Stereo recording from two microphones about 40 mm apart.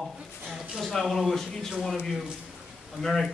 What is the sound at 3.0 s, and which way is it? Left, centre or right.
Speech, centre.